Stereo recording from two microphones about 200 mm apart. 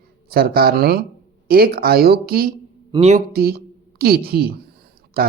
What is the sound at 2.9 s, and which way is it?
Speech, 35° right (ahead or behind).